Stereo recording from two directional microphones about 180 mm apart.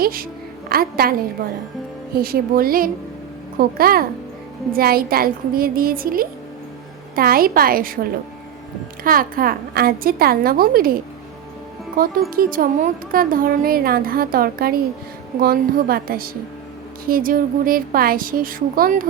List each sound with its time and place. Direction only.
0.0 s a woman's voice: 55° right (ahead or behind)
9.0 s a woman's voice: 55° right (ahead or behind)
12.0 s a woman's voice: 50° right (ahead or behind)